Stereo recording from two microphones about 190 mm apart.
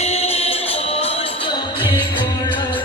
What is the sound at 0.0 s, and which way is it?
Music, 35° left (ahead or behind).